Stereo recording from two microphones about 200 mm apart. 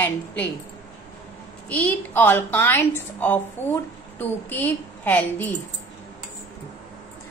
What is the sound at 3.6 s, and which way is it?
Speech, 35° left (ahead or behind).